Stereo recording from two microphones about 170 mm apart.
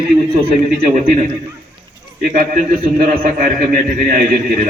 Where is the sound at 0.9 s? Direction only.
50° right (ahead or behind).